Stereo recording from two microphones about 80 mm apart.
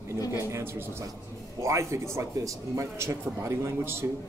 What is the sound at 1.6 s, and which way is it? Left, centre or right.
A man's voice, right.